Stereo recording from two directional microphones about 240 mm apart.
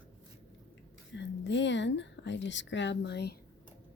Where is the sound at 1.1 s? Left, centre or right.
Left.